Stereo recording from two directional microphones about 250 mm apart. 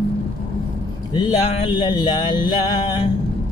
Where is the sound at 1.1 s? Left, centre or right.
Centre.